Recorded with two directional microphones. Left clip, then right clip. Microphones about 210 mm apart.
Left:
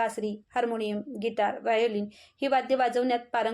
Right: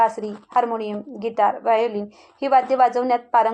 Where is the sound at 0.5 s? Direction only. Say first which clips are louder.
Right 9 dB; 35° right (ahead or behind).